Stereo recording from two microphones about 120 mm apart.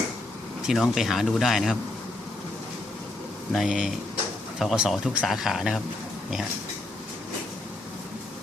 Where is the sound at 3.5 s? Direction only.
Centre (ahead or behind).